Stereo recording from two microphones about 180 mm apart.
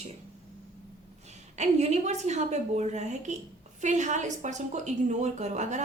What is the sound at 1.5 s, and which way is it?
A woman's voice, 40° right (ahead or behind).